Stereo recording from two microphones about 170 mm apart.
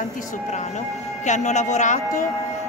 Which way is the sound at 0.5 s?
45° left (ahead or behind).